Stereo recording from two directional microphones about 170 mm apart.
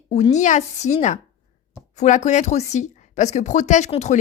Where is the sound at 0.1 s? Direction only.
40° left (ahead or behind).